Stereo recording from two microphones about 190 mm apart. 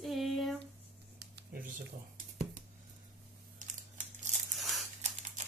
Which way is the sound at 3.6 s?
40° right (ahead or behind).